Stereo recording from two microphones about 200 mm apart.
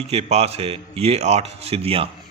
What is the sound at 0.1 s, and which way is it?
A man's voice, 30° right (ahead or behind).